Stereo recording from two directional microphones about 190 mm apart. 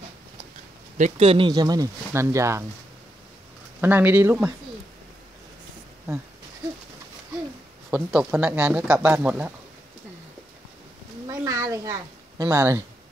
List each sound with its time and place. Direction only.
0.9 s speech: 35° right (ahead or behind); by 2.6 s 15° right (ahead or behind)
3.8 s speech: 10° right (ahead or behind)
7.9 s speech: 5° right (ahead or behind)
11.2 s a sound: 15° right (ahead or behind)